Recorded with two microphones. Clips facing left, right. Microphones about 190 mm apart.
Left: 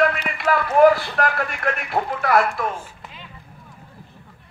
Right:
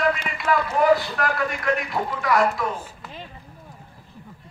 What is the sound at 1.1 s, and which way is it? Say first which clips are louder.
Speech: left 2 dB; 55° left (ahead or behind).